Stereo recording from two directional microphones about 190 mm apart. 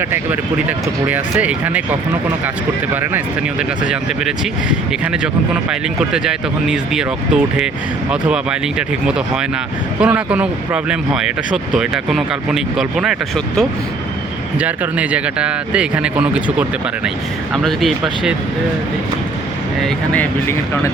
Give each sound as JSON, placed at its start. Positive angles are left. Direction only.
{"t": 1.0, "sound": "speech", "side_deg": -10}
{"t": 19.8, "sound": "speech", "side_deg": 10}